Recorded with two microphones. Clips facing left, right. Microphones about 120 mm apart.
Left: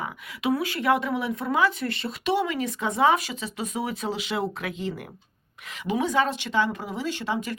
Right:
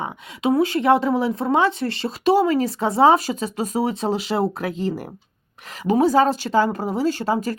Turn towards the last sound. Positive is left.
turn(degrees=-40)  # may be behind; listen again after turning